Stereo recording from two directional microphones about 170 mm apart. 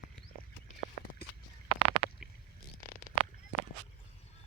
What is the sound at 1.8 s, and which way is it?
Stomach rumble, 35° right (ahead or behind).